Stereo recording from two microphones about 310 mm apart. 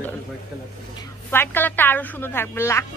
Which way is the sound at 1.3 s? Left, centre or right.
Centre.